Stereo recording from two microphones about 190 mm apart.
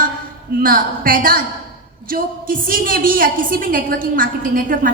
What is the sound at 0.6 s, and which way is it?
A woman's voice, 50° right (ahead or behind).